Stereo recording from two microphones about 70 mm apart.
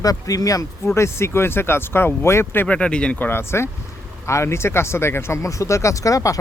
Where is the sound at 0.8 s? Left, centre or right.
Left.